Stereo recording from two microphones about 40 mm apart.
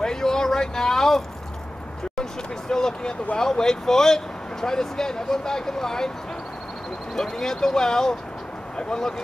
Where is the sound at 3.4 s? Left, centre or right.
Centre.